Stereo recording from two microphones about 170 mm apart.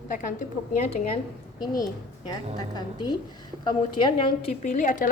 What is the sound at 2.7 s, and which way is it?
A woman's voice, 25° left (ahead or behind).